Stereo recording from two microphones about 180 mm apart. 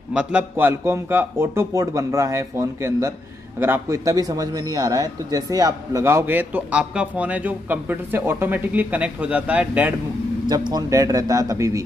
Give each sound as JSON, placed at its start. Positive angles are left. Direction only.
{"t": 0.1, "sound": "a man's voice", "side_deg": -5}
{"t": 10.5, "sound": "a man's voice", "side_deg": -20}